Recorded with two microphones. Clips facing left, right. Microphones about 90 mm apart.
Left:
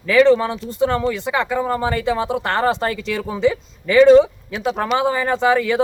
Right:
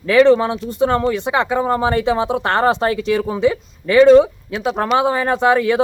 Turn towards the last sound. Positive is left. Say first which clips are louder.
# right 2 dB
turn(degrees=-15)  # may be behind; listen again after turning